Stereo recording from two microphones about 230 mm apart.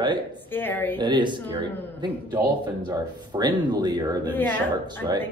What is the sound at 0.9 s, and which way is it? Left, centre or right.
Speech, centre.